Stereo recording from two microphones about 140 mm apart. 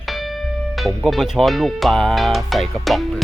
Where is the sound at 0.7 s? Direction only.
Centre (ahead or behind).